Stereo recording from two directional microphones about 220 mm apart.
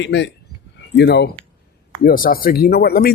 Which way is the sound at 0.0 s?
55° left (ahead or behind).